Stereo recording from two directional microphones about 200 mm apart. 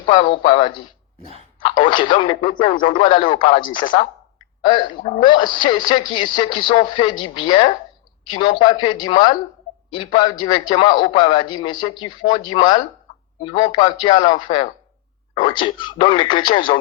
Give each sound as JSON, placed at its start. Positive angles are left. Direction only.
{"t": 0.3, "sound": "speech", "side_deg": 25}